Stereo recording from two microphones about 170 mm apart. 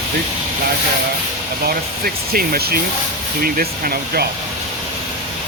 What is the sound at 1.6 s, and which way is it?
Speech, 60° right (ahead or behind).